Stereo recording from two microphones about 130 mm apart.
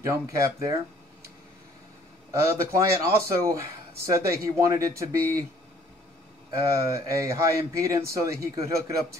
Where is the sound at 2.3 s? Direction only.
25° right (ahead or behind).